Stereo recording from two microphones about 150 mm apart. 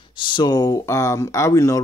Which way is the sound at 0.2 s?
30° left (ahead or behind).